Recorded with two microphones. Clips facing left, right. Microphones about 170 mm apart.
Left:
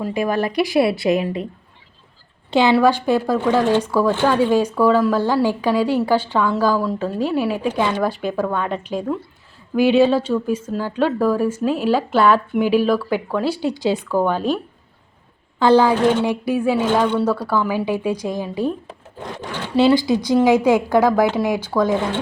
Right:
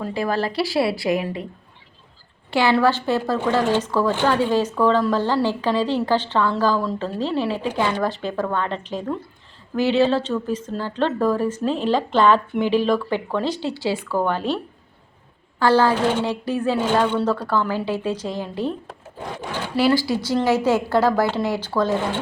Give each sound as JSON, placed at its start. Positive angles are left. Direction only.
{"t": 0.0, "sound": "a woman's voice", "side_deg": 15}
{"t": 2.5, "sound": "a woman's voice", "side_deg": 20}
{"t": 15.5, "sound": "a woman's voice", "side_deg": 20}
{"t": 19.7, "sound": "a woman's voice", "side_deg": 20}